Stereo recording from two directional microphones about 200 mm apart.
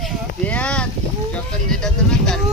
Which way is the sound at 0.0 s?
5° left (ahead or behind).